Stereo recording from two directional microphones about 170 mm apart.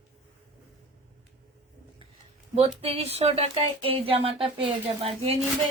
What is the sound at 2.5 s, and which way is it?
Speech, 35° right (ahead or behind).